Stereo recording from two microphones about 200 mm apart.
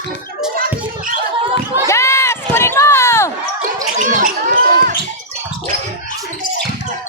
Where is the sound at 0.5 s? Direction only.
45° right (ahead or behind).